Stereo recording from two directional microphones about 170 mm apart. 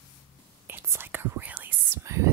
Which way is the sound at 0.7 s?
15° right (ahead or behind).